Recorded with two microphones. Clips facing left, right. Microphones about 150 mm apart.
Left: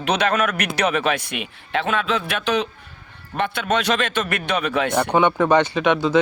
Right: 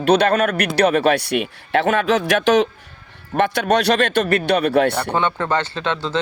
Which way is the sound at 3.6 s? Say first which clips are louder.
Right 3 dB; 40° right (ahead or behind).